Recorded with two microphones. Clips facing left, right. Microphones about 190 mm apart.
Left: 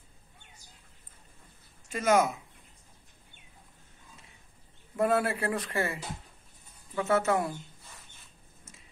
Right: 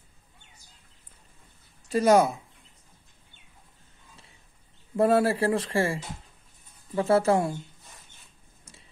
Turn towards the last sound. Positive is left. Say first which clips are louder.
# right 5 dB
turn(degrees=-30)  # may be behind; listen again after turning